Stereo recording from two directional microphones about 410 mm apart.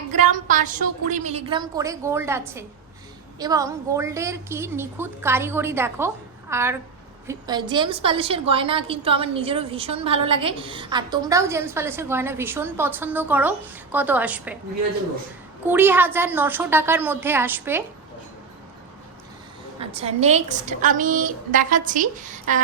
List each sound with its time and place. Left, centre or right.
0.1 s a woman's voice: centre
15.6 s a woman's voice: centre
19.8 s a woman's voice: centre